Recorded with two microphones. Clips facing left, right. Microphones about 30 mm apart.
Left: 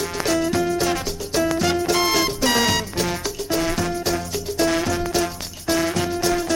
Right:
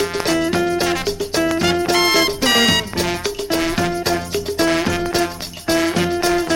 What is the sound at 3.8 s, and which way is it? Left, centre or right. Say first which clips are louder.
Music: right 4 dB; right.